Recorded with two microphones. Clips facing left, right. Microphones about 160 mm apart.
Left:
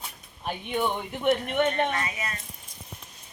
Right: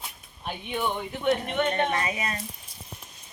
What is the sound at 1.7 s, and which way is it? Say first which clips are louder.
Speech: right 1 dB; 30° right (ahead or behind).